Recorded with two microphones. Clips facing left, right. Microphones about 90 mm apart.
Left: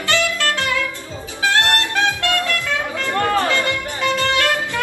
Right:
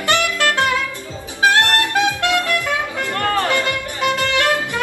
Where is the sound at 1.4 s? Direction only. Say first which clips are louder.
Right 3 dB; 20° right (ahead or behind).